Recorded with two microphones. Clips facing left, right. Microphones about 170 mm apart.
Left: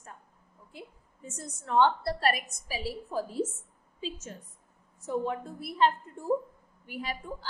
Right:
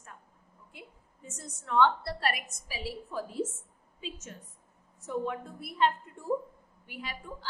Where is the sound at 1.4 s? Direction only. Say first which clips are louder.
Left 1 dB; 40° left (ahead or behind).